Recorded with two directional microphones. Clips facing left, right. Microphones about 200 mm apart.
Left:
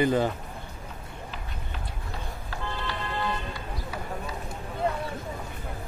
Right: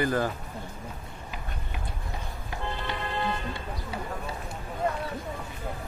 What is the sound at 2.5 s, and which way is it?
Music, 25° right (ahead or behind).